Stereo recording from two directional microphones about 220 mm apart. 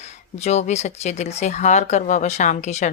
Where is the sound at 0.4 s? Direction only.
30° left (ahead or behind).